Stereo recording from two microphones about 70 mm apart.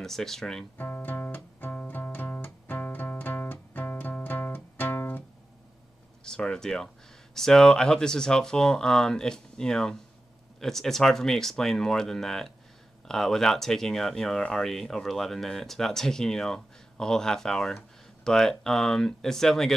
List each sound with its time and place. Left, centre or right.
0.0 s speech: centre
0.7 s music: left
6.2 s speech: centre